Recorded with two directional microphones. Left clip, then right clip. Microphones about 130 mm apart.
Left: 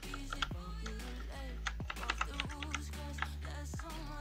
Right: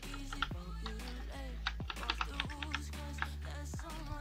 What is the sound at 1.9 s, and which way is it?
Music, 5° right (ahead or behind).